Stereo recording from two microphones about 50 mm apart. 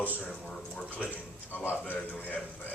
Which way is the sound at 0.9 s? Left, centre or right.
Left.